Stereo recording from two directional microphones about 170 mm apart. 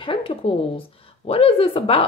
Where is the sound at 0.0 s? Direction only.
30° left (ahead or behind).